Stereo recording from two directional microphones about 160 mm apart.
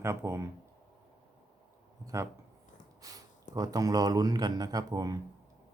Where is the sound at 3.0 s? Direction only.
20° right (ahead or behind).